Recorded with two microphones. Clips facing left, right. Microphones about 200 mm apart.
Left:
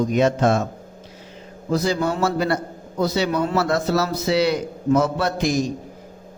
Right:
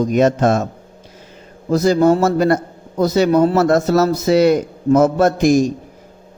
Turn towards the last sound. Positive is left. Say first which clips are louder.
# right 8 dB
turn(degrees=-45)  # may be behind; listen again after turning